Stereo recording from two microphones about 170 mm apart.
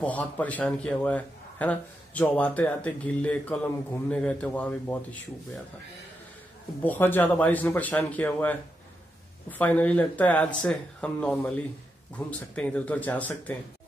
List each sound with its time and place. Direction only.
0.0 s speech: 10° left (ahead or behind)
6.8 s speech: 10° left (ahead or behind)